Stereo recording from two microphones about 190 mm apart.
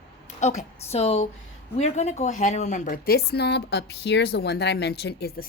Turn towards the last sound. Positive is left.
turn(degrees=60)  # may be behind; listen again after turning